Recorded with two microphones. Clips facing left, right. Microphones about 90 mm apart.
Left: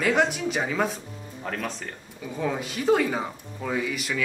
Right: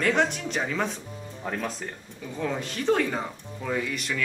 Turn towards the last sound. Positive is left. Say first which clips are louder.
# left 1 dB
turn(degrees=5)  # may be behind; listen again after turning